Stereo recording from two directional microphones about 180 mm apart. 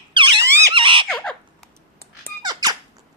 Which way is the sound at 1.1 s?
5° left (ahead or behind).